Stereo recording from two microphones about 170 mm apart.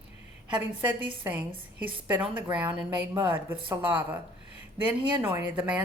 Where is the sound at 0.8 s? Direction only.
10° right (ahead or behind).